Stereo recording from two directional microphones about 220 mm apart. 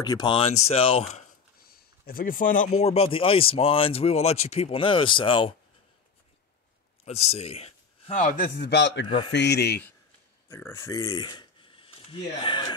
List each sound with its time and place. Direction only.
0.0 s speech: 20° left (ahead or behind)
1.7 s speech: 40° left (ahead or behind); by 5.5 s 25° left (ahead or behind)
7.1 s a man's voice: 30° left (ahead or behind); by 9.0 s 50° left (ahead or behind)
9.0 s speech: 20° left (ahead or behind)
9.3 s speech: 50° left (ahead or behind)
10.5 s speech: 10° left (ahead or behind)